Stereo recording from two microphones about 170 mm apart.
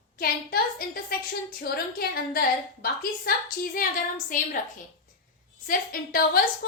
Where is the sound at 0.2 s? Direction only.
60° left (ahead or behind).